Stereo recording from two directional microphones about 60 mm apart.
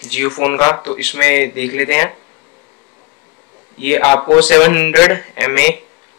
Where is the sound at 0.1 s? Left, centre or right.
Centre.